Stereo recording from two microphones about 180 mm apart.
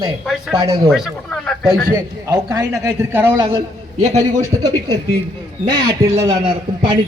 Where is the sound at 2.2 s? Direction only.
15° right (ahead or behind).